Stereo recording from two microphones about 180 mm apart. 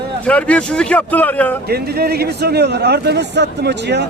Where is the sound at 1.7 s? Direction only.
60° right (ahead or behind).